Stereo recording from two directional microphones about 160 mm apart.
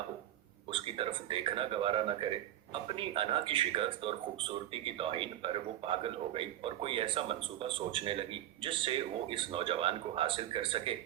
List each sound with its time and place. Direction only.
0.7 s speech: 35° right (ahead or behind)